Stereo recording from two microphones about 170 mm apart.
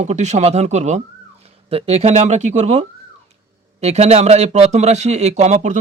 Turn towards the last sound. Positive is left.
turn(degrees=-45)  # may be behind; listen again after turning